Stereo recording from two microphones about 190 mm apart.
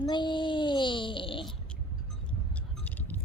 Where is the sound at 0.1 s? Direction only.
25° left (ahead or behind).